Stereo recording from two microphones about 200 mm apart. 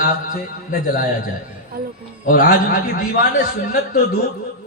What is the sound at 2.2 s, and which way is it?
A man's voice, 45° left (ahead or behind).